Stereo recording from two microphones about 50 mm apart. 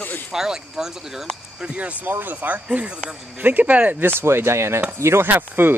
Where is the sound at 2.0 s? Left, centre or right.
Right.